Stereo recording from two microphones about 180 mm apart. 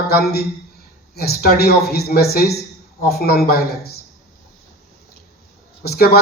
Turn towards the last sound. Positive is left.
turn(degrees=60)  # may be behind; listen again after turning